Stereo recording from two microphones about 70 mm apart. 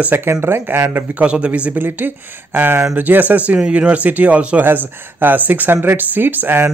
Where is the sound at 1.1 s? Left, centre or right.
Centre.